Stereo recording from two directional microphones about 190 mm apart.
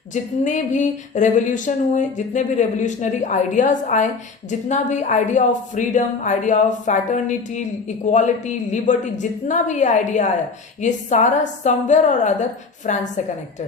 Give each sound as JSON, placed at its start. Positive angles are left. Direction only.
{"t": 0.1, "sound": "speech", "side_deg": 40}